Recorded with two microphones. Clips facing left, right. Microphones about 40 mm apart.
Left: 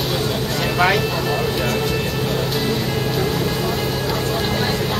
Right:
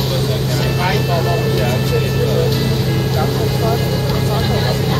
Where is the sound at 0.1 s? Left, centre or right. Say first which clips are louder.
Right 2 dB; centre.